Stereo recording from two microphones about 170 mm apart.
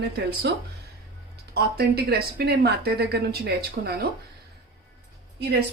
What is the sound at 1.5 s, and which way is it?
A woman's voice, 70° right (ahead or behind).